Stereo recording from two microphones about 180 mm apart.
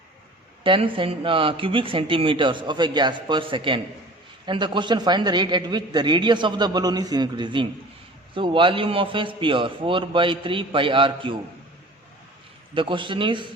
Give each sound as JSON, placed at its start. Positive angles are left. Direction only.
{"t": 0.6, "sound": "a man's voice", "side_deg": -30}
{"t": 12.7, "sound": "a man's voice", "side_deg": -30}